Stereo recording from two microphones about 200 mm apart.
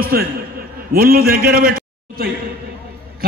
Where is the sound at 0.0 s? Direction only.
50° right (ahead or behind).